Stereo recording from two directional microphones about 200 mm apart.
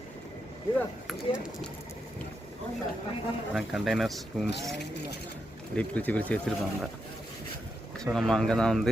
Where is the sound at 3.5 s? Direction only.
Centre (ahead or behind).